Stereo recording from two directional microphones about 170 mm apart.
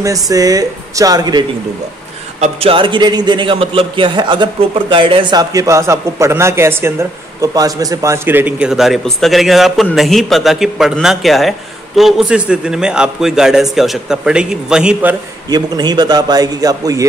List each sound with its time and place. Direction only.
0.0 s a man's voice: 20° right (ahead or behind)
2.4 s a man's voice: 35° right (ahead or behind); by 15.1 s 10° right (ahead or behind)
15.5 s a man's voice: 25° right (ahead or behind)